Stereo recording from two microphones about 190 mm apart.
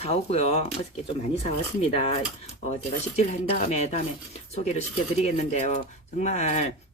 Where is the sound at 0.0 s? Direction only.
35° left (ahead or behind).